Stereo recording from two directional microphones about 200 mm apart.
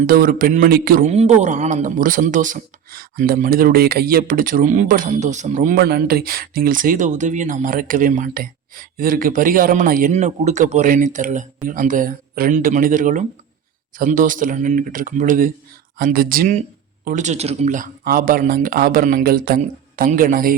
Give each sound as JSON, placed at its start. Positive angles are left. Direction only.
{"t": 0.1, "sound": "a man's voice", "side_deg": -45}